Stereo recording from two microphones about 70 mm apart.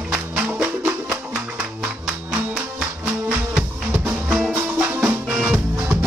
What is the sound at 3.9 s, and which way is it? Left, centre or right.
Music, right.